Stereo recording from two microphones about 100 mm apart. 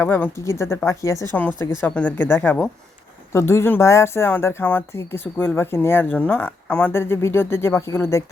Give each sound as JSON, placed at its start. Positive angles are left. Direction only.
{"t": 0.0, "sound": "a woman's voice", "side_deg": 25}
{"t": 1.3, "sound": "speech", "side_deg": 15}
{"t": 6.9, "sound": "speech", "side_deg": 25}